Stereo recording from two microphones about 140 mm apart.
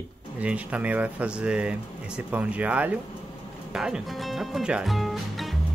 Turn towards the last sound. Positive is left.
turn(degrees=0)  # may be behind; listen again after turning